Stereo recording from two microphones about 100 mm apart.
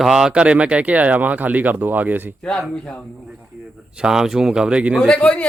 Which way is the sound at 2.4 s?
5° left (ahead or behind).